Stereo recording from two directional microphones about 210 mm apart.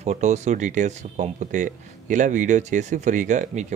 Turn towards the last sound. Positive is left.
turn(degrees=-35)  # may be behind; listen again after turning